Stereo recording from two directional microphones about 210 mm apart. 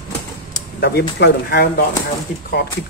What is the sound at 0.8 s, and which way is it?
Speech, 50° left (ahead or behind).